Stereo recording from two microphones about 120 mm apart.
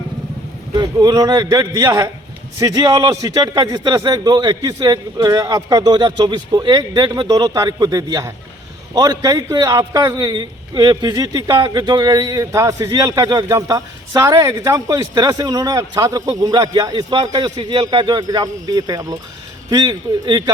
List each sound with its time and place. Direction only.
0.8 s a man's voice: 35° right (ahead or behind)